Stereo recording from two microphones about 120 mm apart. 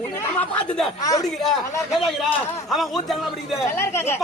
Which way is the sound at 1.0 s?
30° left (ahead or behind).